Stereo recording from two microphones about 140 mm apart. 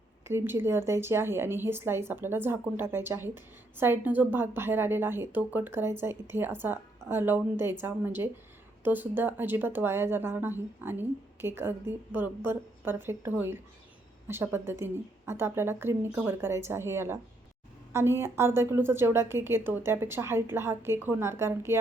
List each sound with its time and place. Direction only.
0.3 s speech: 15° right (ahead or behind)